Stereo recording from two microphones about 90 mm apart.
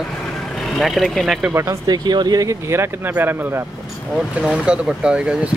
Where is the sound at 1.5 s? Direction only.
30° right (ahead or behind).